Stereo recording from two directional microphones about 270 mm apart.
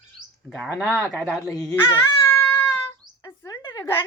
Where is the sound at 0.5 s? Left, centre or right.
Centre.